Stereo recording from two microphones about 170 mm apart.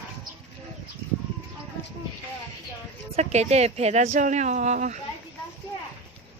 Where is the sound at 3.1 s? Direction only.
40° right (ahead or behind).